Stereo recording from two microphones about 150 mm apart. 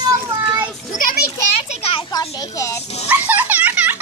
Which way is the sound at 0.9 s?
65° left (ahead or behind).